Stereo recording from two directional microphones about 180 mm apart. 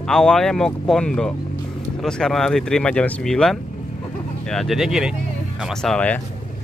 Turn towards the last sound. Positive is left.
turn(degrees=5)  # may be behind; listen again after turning